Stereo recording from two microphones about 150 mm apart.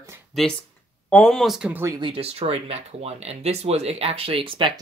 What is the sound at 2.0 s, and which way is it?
Speech, 40° right (ahead or behind).